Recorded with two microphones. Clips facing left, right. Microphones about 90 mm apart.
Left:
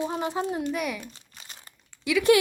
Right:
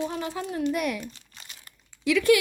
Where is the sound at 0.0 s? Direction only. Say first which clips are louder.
Left 3 dB; 25° left (ahead or behind).